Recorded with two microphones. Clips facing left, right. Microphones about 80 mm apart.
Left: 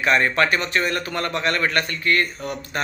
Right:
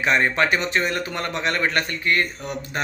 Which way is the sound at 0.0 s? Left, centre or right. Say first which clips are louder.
Left 1 dB; right.